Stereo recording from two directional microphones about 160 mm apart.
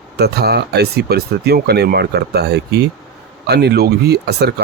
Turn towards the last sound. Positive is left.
turn(degrees=-90)